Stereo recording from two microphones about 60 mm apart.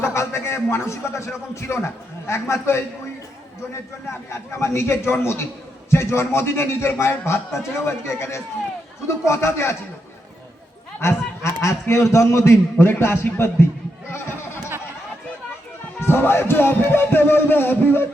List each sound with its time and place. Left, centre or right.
0.0 s a man's voice: left
4.3 s a man's voice: left
11.0 s speech: left
12.8 s a man's voice: left
14.1 s music: left
16.0 s speech: left